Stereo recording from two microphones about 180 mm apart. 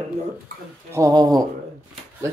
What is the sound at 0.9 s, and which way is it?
Speech, 20° right (ahead or behind).